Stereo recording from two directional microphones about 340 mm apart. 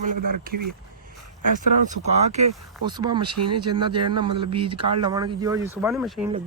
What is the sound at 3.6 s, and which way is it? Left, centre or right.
Speech, centre.